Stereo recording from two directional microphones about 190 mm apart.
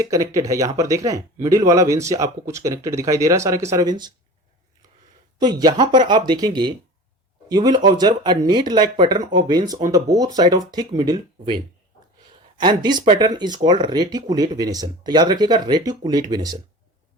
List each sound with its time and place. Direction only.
0.0 s speech: 15° right (ahead or behind)
5.4 s speech: 20° right (ahead or behind)